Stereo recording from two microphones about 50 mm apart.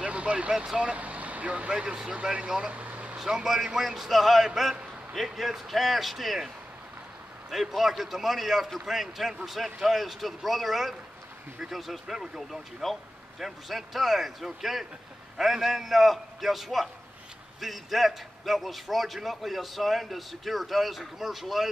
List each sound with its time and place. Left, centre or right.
0.0 s vehicle: right
0.5 s a man's voice: centre
0.7 s speech: right
2.7 s vehicle: right
3.2 s a man's voice: centre